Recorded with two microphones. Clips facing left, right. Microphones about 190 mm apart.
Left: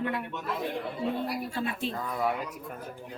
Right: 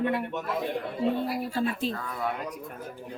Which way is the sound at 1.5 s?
40° right (ahead or behind).